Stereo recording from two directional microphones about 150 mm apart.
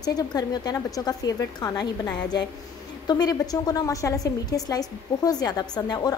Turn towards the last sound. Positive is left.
turn(degrees=25)  # may be behind; listen again after turning